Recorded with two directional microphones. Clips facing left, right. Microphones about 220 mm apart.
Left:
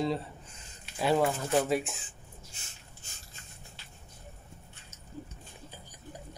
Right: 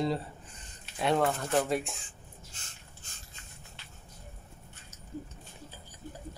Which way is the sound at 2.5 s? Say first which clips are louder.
Even; 10° left (ahead or behind).